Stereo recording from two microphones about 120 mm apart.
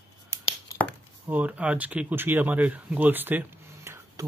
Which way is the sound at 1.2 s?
15° right (ahead or behind).